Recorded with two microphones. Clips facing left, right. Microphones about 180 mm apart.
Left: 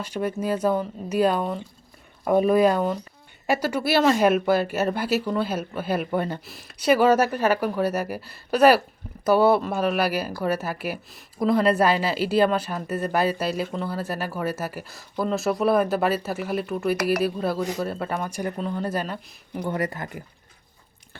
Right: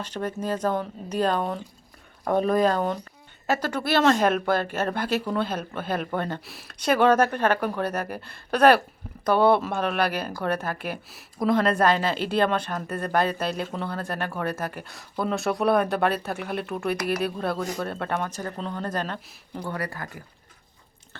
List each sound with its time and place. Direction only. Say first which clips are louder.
0.0 s speech: left 3 dB; 10° left (ahead or behind)
19.6 s speech: left 5 dB; 20° left (ahead or behind)